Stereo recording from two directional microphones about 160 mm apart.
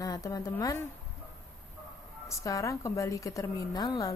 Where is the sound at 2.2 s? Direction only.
20° left (ahead or behind).